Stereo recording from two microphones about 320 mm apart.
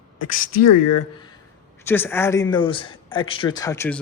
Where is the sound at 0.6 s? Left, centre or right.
Left.